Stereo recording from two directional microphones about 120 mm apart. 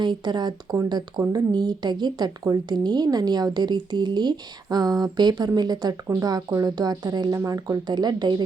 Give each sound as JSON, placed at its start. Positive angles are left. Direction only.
{"t": 0.0, "sound": "a woman's voice", "side_deg": -40}